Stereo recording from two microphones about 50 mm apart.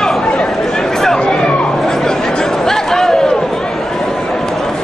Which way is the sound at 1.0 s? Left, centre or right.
Centre.